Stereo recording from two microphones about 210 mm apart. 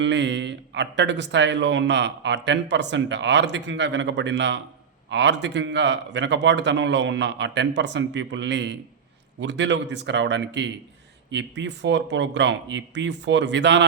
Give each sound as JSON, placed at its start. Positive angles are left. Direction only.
{"t": 0.0, "sound": "speech", "side_deg": -55}